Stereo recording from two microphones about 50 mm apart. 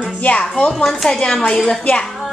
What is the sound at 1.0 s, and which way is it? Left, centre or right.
A woman's voice, centre.